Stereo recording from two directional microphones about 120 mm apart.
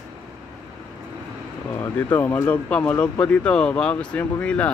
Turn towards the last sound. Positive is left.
turn(degrees=10)  # may be behind; listen again after turning